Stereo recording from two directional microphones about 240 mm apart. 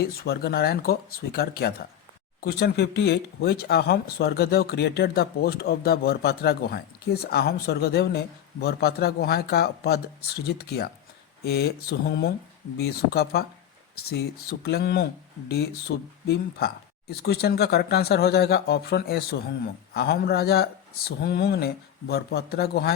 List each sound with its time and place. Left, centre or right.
0.0 s speech: left